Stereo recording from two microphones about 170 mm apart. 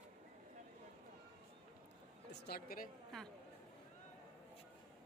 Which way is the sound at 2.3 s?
70° left (ahead or behind).